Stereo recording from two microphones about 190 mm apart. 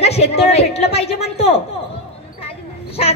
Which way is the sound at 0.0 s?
35° left (ahead or behind).